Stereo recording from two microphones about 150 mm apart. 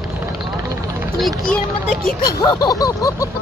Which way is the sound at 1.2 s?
Centre (ahead or behind).